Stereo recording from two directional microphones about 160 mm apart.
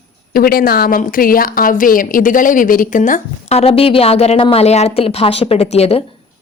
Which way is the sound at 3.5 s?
40° left (ahead or behind).